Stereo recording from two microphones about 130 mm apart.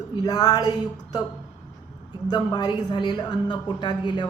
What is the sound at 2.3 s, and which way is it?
Speech, 35° left (ahead or behind).